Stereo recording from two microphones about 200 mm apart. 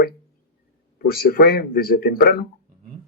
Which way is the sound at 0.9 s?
50° left (ahead or behind).